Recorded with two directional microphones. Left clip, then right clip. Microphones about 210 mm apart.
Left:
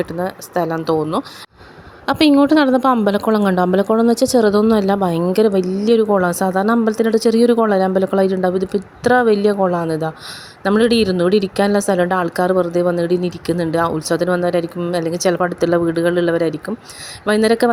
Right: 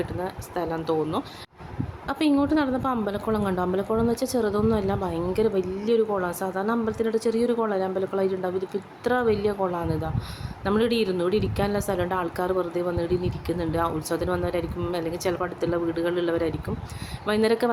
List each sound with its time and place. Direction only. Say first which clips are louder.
0.0 s a woman's voice: left 9 dB; 40° left (ahead or behind)